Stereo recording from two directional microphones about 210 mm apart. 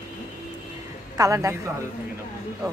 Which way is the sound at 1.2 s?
15° right (ahead or behind).